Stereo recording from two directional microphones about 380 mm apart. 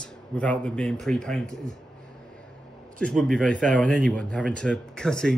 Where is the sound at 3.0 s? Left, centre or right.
Centre.